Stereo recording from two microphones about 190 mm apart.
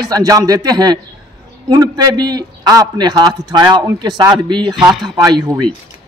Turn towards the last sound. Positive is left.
turn(degrees=-20)  # may be behind; listen again after turning